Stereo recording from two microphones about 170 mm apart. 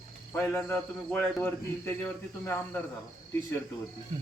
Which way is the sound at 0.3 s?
10° left (ahead or behind).